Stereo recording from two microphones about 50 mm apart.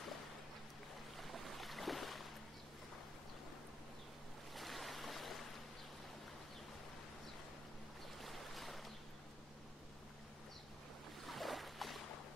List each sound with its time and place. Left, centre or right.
1.1 s boat: centre
4.6 s a sound: centre
8.2 s boat: centre
11.2 s boat: centre